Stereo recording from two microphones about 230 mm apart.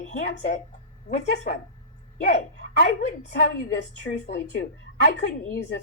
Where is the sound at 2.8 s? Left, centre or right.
Left.